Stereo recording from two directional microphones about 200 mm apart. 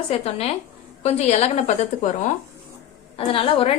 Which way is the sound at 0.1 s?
30° left (ahead or behind).